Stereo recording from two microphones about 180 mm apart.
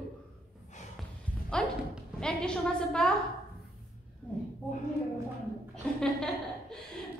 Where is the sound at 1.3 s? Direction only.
10° left (ahead or behind).